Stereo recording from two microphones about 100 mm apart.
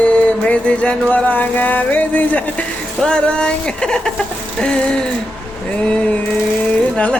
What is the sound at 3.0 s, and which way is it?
Speech, 10° left (ahead or behind).